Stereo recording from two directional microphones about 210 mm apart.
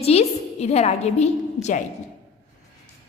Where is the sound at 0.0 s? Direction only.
30° left (ahead or behind).